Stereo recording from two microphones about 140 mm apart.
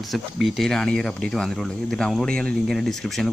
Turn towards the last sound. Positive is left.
turn(degrees=0)  # may be behind; listen again after turning